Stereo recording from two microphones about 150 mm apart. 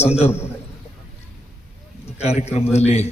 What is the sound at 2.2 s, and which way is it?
Speech, 45° left (ahead or behind).